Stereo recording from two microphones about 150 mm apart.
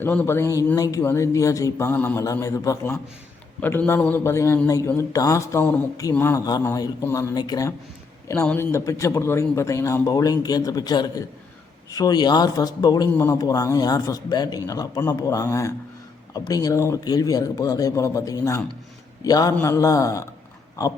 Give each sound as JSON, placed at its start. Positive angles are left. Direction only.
{"t": 0.0, "sound": "speech", "side_deg": 10}
{"t": 2.2, "sound": "a man's voice", "side_deg": 20}
{"t": 8.3, "sound": "speech", "side_deg": 15}